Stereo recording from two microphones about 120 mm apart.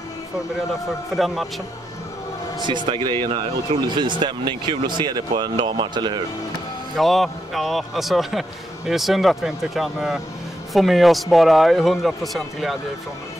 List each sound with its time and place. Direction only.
1.1 s a man's voice: centre (ahead or behind)
2.6 s speech: 40° right (ahead or behind)
7.0 s a man's voice: centre (ahead or behind)